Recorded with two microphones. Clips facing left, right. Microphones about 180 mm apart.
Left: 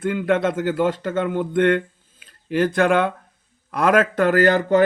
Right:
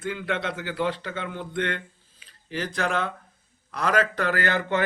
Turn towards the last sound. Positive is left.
turn(degrees=40)  # may be behind; listen again after turning